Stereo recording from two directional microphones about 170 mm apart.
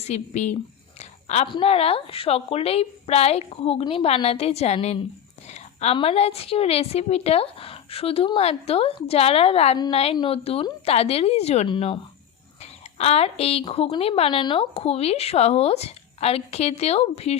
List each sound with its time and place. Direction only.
0.0 s speech: 40° left (ahead or behind)
0.9 s a sound: 40° left (ahead or behind)
1.5 s speech: 30° left (ahead or behind)
9.7 s a woman's voice: 25° left (ahead or behind)
13.0 s speech: 40° left (ahead or behind)